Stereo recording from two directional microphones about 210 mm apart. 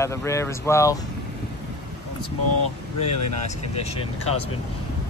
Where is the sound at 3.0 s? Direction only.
30° left (ahead or behind).